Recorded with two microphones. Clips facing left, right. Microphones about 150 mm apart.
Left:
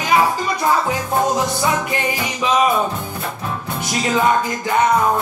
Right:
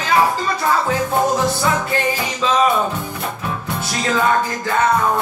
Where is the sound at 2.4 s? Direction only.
15° left (ahead or behind).